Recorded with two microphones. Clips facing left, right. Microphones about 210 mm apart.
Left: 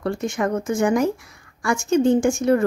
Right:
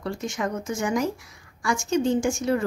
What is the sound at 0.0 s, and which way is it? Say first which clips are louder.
A woman's voice: left 5 dB; 55° left (ahead or behind).